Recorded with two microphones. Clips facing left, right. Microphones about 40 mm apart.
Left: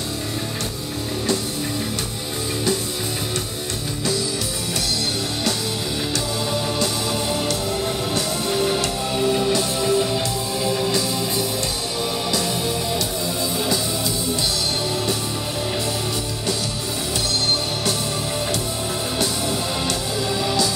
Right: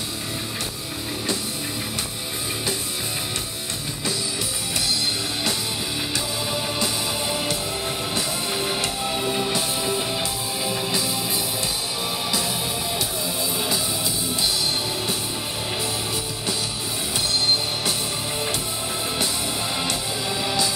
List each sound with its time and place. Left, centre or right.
6.5 s music: centre
19.9 s music: centre